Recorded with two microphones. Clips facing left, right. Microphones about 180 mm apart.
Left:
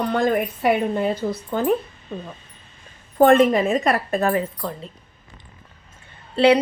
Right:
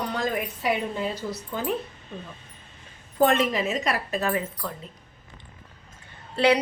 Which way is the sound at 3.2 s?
50° left (ahead or behind).